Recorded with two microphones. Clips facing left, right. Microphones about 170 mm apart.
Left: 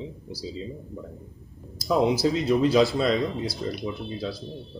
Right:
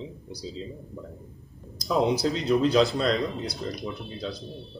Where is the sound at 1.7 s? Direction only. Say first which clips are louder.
Left 2 dB; centre (ahead or behind).